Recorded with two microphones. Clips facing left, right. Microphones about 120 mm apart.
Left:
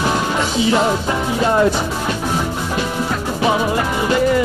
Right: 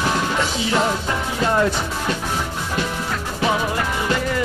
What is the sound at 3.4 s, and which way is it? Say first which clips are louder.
Music: left 4 dB; 10° left (ahead or behind).